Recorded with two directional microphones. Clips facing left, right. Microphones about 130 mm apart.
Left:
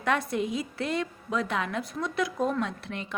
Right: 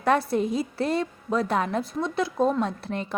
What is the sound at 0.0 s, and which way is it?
A woman's voice, 35° right (ahead or behind).